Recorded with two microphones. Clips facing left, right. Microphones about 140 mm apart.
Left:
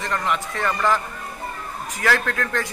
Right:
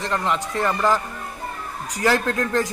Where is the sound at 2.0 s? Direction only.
25° right (ahead or behind).